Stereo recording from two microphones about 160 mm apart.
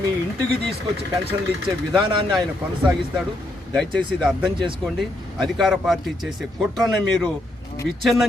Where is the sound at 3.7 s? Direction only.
5° left (ahead or behind).